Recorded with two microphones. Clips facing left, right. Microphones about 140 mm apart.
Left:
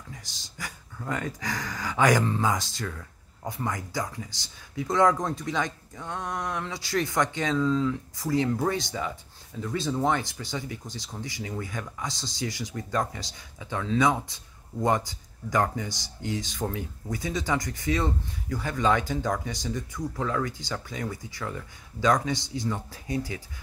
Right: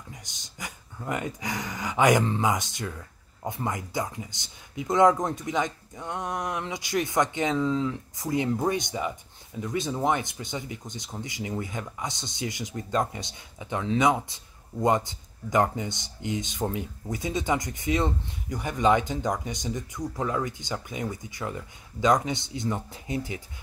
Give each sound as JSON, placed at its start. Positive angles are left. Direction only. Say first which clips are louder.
{"t": 0.1, "sound": "speech", "louder": "left 1 dB", "side_deg": -20}